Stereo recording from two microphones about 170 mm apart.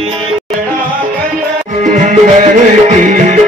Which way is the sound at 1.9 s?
50° right (ahead or behind).